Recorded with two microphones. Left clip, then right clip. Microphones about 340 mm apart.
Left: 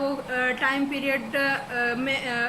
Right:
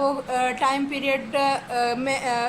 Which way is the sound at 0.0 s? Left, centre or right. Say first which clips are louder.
Right 3 dB; centre.